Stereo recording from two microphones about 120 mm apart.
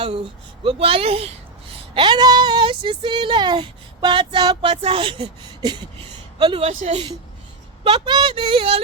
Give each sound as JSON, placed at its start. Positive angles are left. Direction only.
{"t": 0.6, "sound": "speech", "side_deg": -50}
{"t": 1.9, "sound": "speech", "side_deg": -40}
{"t": 4.7, "sound": "speech", "side_deg": -55}
{"t": 6.4, "sound": "speech", "side_deg": -45}
{"t": 6.7, "sound": "a woman's voice", "side_deg": -65}
{"t": 7.9, "sound": "speech", "side_deg": -40}